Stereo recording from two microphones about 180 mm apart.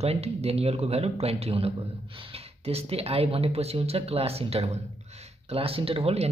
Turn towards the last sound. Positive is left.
turn(degrees=-35)  # may be behind; listen again after turning